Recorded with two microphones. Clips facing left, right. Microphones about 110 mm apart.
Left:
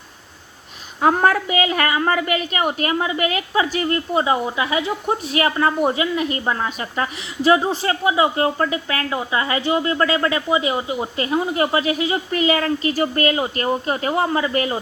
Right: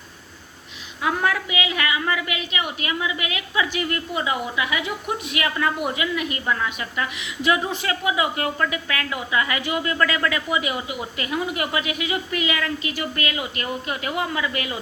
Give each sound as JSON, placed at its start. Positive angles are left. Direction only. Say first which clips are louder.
{"t": 1.0, "sound": "a woman's voice", "louder": "left 7 dB", "side_deg": 45}